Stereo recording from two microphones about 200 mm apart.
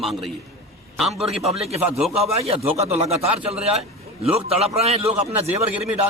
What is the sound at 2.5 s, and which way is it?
A man's voice, 30° right (ahead or behind).